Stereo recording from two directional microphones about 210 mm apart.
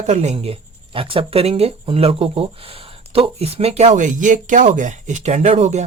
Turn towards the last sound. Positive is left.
turn(degrees=-30)  # may be behind; listen again after turning